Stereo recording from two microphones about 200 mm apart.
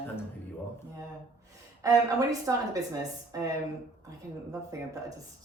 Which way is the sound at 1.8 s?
15° right (ahead or behind).